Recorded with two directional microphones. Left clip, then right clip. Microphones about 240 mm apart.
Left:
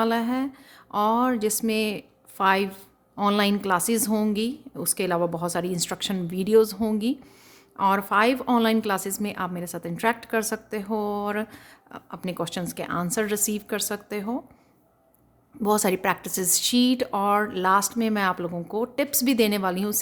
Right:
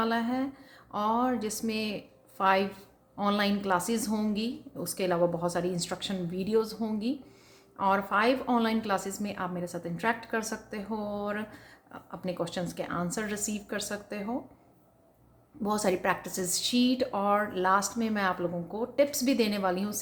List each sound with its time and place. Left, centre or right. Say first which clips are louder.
0.0 s a woman's voice: left 5 dB; left
15.6 s a woman's voice: left 5 dB; left